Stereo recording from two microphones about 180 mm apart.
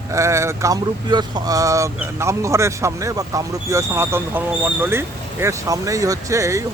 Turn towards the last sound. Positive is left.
turn(degrees=-15)  # may be behind; listen again after turning